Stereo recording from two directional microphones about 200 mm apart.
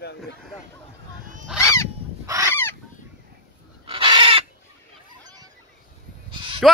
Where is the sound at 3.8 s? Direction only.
25° right (ahead or behind).